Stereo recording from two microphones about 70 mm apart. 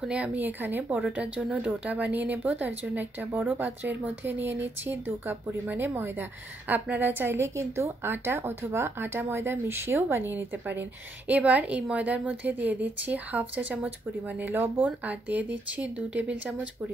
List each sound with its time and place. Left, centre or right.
0.0 s speech: centre
0.9 s a woman's voice: centre